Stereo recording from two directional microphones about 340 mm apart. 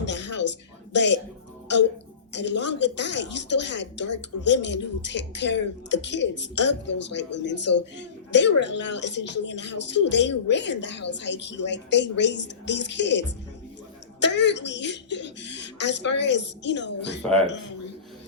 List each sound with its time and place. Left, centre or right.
0.0 s a sound: left
0.9 s a woman's voice: left
2.3 s a woman's voice: left